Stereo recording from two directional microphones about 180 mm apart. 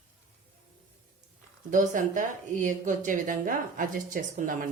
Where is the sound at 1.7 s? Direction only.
45° right (ahead or behind).